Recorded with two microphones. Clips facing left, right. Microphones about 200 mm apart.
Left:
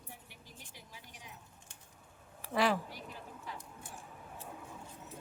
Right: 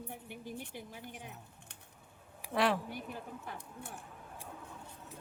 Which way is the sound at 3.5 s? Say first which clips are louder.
Left 2 dB; 55° right (ahead or behind).